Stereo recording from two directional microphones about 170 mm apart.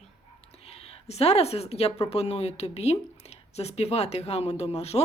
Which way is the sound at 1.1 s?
35° left (ahead or behind).